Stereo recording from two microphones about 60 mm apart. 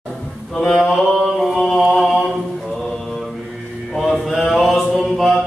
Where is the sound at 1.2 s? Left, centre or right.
Centre.